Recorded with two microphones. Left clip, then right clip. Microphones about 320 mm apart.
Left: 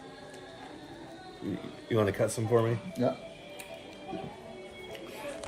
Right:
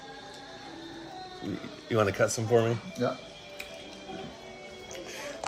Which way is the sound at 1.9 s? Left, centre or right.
Centre.